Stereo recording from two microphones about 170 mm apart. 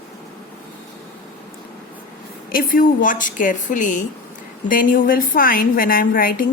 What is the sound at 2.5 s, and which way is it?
A woman's voice, 55° left (ahead or behind).